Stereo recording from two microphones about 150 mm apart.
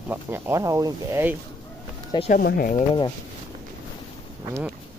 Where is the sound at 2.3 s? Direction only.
70° left (ahead or behind).